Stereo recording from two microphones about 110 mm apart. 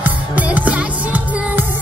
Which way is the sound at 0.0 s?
15° right (ahead or behind).